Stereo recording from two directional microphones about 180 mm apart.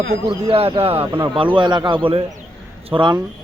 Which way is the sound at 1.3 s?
25° right (ahead or behind).